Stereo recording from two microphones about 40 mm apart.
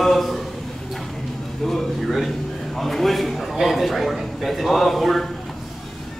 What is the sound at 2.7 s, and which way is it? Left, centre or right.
A man's voice, centre.